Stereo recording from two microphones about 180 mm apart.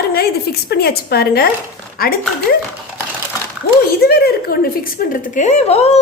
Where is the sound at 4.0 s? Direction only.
60° left (ahead or behind).